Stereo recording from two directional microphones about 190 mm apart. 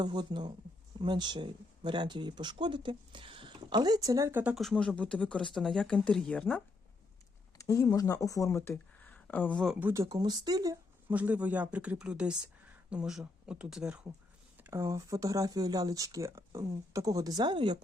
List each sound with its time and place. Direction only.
0.0 s speech: 25° right (ahead or behind); by 6.6 s 5° left (ahead or behind)
7.6 s speech: 15° left (ahead or behind)
9.8 s speech: 15° right (ahead or behind)
11.1 s speech: 10° right (ahead or behind); by 17.7 s 25° right (ahead or behind)